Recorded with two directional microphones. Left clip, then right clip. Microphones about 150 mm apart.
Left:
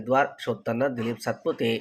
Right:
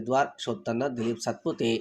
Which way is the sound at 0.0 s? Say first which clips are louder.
Left 3 dB; 40° right (ahead or behind).